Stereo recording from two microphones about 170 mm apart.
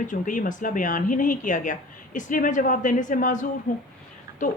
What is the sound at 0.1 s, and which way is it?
Speech, 50° left (ahead or behind).